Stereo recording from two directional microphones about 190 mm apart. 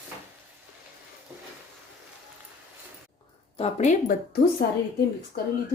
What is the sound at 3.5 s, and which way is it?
Speech, 35° left (ahead or behind).